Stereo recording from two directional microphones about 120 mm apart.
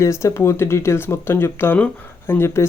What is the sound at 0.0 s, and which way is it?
Speech, 25° left (ahead or behind).